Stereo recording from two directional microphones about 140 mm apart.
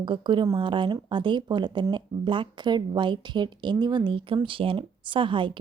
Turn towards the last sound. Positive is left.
turn(degrees=-35)  # may be behind; listen again after turning